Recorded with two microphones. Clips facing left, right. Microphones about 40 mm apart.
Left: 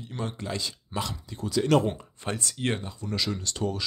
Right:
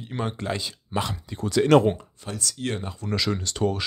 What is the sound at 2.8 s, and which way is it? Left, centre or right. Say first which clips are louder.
Speech: right 4 dB; right.